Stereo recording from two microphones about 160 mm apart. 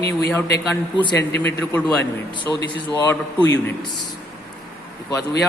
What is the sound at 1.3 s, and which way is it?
A man's voice, 15° left (ahead or behind).